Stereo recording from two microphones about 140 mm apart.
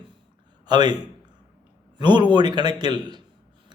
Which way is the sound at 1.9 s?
30° right (ahead or behind).